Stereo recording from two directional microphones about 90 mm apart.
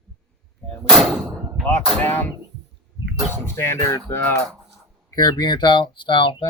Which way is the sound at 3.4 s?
30° left (ahead or behind).